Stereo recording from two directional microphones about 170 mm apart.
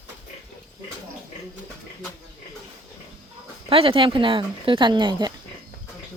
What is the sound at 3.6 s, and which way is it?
Speech, 35° right (ahead or behind).